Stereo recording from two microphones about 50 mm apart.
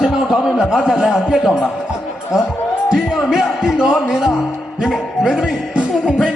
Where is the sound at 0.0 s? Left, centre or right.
Centre.